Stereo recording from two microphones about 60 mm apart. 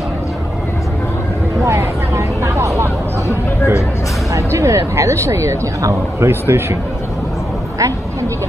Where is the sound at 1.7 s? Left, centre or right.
Right.